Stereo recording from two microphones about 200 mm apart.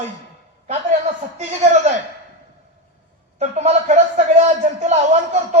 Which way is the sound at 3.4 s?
35° right (ahead or behind).